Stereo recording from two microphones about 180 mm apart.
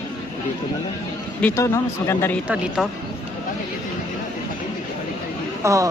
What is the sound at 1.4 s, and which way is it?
Speech, 15° left (ahead or behind).